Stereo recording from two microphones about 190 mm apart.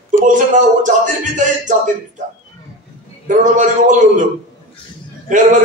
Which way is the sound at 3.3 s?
40° right (ahead or behind).